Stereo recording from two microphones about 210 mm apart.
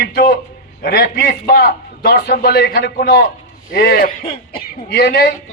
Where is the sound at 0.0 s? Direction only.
50° left (ahead or behind).